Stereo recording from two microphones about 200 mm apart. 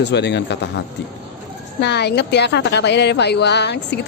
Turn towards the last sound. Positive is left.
turn(degrees=60)  # may be behind; listen again after turning